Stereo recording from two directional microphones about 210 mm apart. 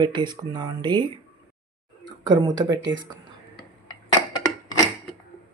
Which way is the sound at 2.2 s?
20° right (ahead or behind).